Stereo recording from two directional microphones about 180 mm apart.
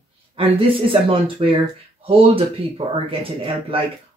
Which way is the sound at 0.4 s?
30° right (ahead or behind).